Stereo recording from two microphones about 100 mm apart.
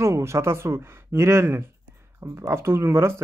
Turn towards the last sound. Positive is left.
turn(degrees=-25)  # may be behind; listen again after turning